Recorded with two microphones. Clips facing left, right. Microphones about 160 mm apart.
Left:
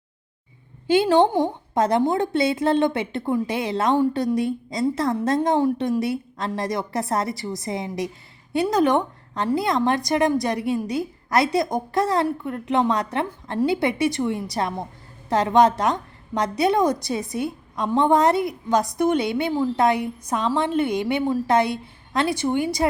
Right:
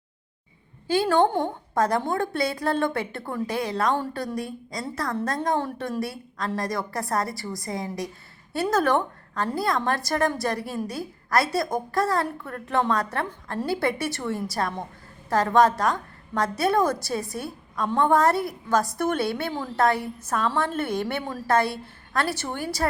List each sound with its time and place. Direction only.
0.9 s a woman's voice: 20° left (ahead or behind)